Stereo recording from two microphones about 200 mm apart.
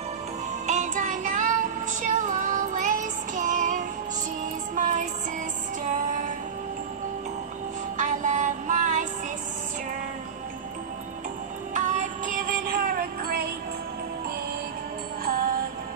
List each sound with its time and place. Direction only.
0.7 s music: 35° right (ahead or behind)
8.0 s music: 40° right (ahead or behind)
11.7 s music: 40° right (ahead or behind)
15.2 s music: 45° right (ahead or behind)